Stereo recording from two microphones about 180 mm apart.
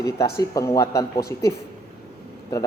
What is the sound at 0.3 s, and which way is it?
Speech, 20° left (ahead or behind).